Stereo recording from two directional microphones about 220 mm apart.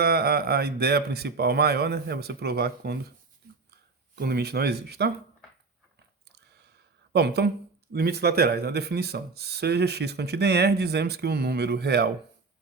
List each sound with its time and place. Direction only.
0.0 s speech: 45° right (ahead or behind)
7.1 s a woman's voice: 50° right (ahead or behind)